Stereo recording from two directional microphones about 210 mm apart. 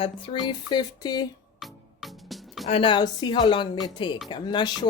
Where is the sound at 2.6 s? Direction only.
25° left (ahead or behind).